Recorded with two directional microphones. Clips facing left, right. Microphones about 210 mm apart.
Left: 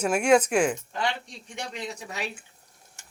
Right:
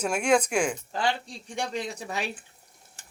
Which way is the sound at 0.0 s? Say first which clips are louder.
Left 3 dB; 5° left (ahead or behind).